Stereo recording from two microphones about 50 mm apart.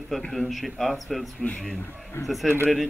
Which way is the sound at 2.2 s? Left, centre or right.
Left.